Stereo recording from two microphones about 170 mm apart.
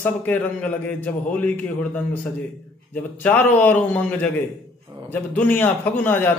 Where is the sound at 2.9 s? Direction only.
10° left (ahead or behind).